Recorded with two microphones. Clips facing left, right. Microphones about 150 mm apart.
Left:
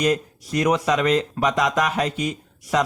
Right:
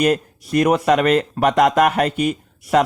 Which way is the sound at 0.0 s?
55° right (ahead or behind).